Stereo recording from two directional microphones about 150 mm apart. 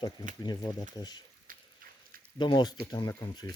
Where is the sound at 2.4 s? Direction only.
30° left (ahead or behind).